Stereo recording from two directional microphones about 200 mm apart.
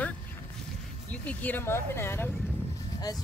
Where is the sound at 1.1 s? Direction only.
5° left (ahead or behind).